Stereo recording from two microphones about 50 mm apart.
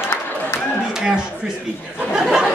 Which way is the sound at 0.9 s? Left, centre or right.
Centre.